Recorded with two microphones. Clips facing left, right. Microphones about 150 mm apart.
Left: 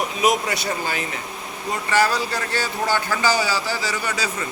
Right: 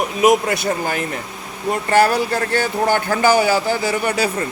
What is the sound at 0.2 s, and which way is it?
Speech, 50° right (ahead or behind).